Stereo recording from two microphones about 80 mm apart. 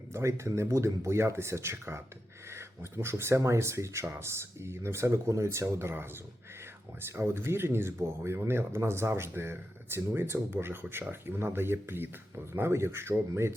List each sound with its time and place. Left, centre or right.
0.1 s speech: right
7.2 s speech: right